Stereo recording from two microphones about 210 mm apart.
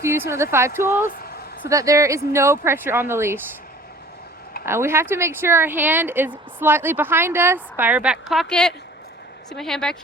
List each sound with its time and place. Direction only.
0.3 s speech: 10° right (ahead or behind)
1.0 s a sound: 45° left (ahead or behind)
1.6 s speech: 15° right (ahead or behind)
4.6 s speech: 10° right (ahead or behind)